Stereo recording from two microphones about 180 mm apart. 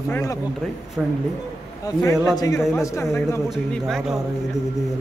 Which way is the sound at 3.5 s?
Centre (ahead or behind).